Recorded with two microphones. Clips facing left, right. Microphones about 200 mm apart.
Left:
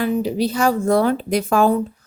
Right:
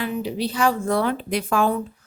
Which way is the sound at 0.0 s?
45° left (ahead or behind).